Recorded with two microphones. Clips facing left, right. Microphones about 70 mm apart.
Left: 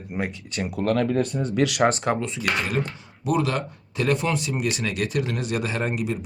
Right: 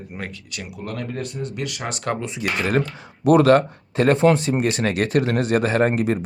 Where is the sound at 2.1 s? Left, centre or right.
Centre.